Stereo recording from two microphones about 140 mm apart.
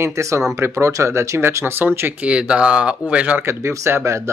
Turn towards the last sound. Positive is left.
turn(degrees=-20)  # may be behind; listen again after turning